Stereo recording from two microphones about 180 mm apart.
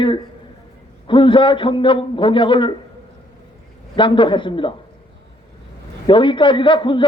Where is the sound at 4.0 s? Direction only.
25° left (ahead or behind).